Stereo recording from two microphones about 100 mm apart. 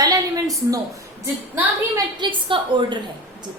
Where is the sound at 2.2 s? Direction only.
50° right (ahead or behind).